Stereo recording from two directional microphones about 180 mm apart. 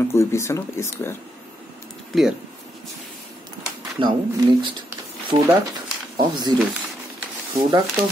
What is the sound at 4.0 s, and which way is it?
Speech, 25° right (ahead or behind).